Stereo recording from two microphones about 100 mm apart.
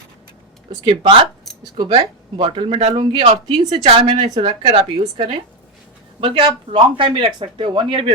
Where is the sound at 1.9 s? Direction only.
65° right (ahead or behind).